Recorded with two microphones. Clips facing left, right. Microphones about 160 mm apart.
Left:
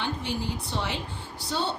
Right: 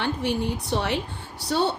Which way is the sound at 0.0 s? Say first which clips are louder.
Right 5 dB; 60° right (ahead or behind).